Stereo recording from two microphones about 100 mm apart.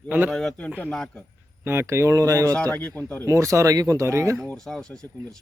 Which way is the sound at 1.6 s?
25° right (ahead or behind).